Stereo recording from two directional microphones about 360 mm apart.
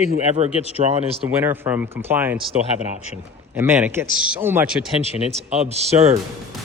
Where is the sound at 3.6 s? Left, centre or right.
Centre.